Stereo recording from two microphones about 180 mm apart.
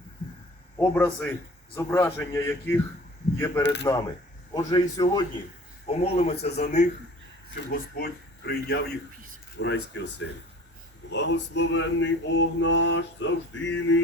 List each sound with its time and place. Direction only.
0.8 s a man's voice: 10° left (ahead or behind)
3.6 s speech: 70° left (ahead or behind)
4.5 s a man's voice: 20° left (ahead or behind)
5.9 s speech: 35° left (ahead or behind)
7.5 s a man's voice: 60° left (ahead or behind)
9.6 s speech: 75° left (ahead or behind)
11.1 s male singing: 80° left